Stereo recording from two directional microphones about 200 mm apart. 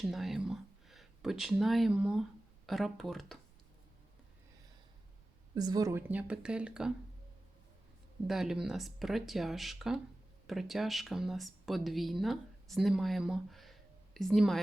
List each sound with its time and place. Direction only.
0.0 s speech: centre (ahead or behind)
5.5 s speech: 20° right (ahead or behind)
8.3 s speech: centre (ahead or behind)